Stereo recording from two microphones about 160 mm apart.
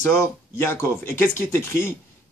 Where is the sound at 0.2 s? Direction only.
15° left (ahead or behind).